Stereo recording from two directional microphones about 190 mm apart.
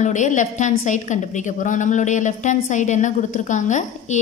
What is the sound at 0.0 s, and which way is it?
A woman's voice, 40° left (ahead or behind).